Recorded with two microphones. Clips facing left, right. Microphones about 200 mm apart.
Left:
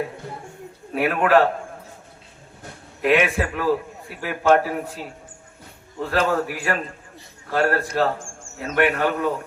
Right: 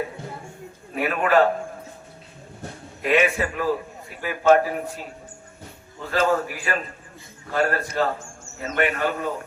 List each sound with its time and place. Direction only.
0.9 s a man's voice: 60° left (ahead or behind)
3.0 s a man's voice: 60° left (ahead or behind)
6.0 s a man's voice: 65° left (ahead or behind)